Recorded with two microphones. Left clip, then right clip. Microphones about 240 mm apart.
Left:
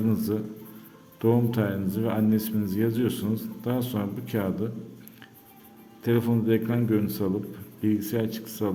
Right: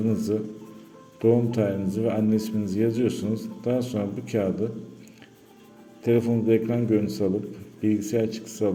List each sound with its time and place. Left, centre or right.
0.1 s speech: centre
6.0 s speech: centre